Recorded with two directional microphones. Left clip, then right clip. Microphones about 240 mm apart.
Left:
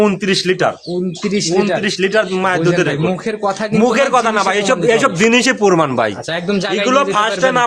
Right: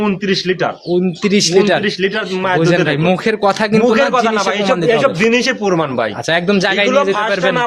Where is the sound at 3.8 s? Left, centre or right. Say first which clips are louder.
Left 2 dB; left.